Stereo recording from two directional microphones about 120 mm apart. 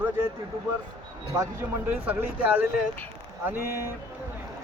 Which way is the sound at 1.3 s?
30° right (ahead or behind).